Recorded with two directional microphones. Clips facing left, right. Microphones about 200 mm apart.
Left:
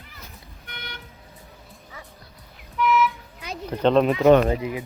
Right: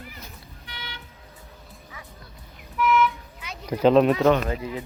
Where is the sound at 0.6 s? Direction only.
50° left (ahead or behind).